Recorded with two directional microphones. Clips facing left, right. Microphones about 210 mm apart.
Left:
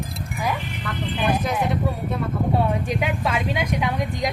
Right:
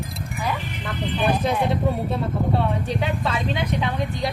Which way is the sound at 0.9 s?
25° right (ahead or behind).